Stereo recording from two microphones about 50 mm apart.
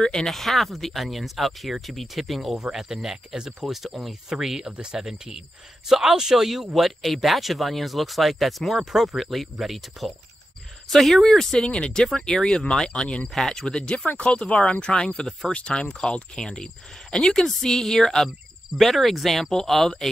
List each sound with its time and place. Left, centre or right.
0.0 s speech: centre
13.9 s speech: left; by 20.1 s centre